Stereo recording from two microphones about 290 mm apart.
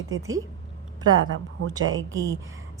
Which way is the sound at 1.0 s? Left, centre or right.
Right.